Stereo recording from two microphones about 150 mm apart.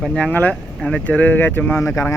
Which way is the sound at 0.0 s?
5° left (ahead or behind).